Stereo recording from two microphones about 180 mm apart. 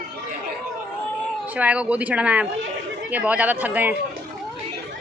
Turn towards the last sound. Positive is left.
turn(degrees=-10)  # may be behind; listen again after turning